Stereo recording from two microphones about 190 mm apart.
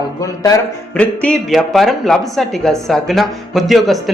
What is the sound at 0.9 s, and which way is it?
Speech, 5° left (ahead or behind).